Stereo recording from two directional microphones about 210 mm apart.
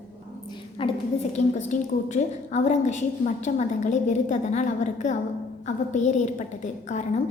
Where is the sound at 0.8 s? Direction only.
25° left (ahead or behind).